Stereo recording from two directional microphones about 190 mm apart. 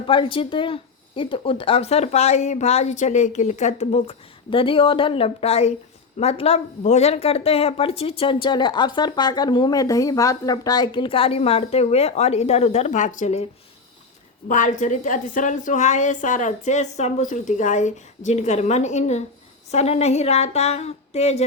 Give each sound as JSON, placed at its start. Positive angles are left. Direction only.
{"t": 0.1, "sound": "speech", "side_deg": 25}